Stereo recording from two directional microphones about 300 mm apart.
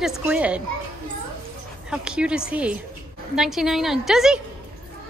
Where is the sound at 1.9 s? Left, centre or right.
Centre.